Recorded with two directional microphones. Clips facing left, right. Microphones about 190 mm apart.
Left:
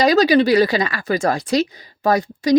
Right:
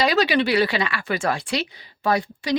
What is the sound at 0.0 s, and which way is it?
Speech, 40° left (ahead or behind).